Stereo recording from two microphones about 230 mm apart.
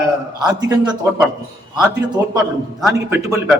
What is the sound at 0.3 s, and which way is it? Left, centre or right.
Speech, centre.